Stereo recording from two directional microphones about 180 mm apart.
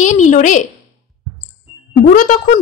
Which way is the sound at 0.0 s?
45° left (ahead or behind).